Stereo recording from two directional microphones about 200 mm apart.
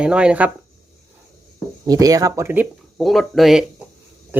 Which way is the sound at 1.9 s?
15° right (ahead or behind).